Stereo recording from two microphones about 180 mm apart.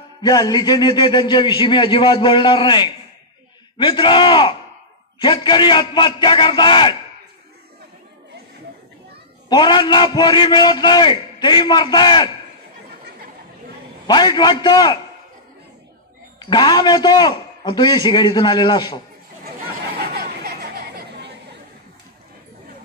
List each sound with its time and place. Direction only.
0.2 s a man's voice: 20° left (ahead or behind)
9.5 s a man's voice: 25° left (ahead or behind)
14.0 s a man's voice: 25° left (ahead or behind)
16.3 s a man's voice: 25° left (ahead or behind)
20.1 s chatter: 65° right (ahead or behind)